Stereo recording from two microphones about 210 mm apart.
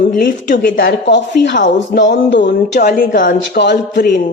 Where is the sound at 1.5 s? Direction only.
40° left (ahead or behind); by 4.1 s 55° left (ahead or behind).